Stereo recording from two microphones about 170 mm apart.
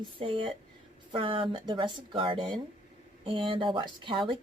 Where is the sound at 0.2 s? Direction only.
30° right (ahead or behind).